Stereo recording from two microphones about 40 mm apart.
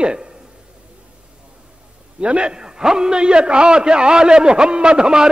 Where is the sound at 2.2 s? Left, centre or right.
Right.